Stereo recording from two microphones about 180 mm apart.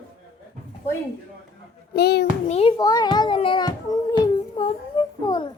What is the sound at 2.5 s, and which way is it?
Speech, 35° left (ahead or behind).